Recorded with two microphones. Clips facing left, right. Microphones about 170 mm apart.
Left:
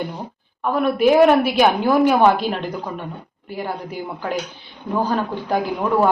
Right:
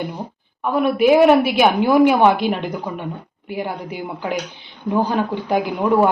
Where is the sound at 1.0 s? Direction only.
5° right (ahead or behind).